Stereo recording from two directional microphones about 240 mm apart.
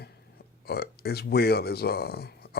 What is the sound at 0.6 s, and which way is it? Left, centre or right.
Speech, left.